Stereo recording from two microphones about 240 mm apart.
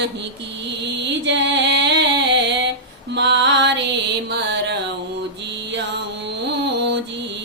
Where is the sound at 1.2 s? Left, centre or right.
Right.